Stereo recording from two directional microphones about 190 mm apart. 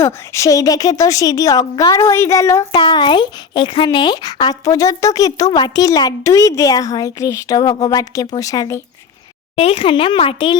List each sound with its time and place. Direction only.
0.0 s a woman's voice: 15° left (ahead or behind)
9.6 s speech: 30° left (ahead or behind)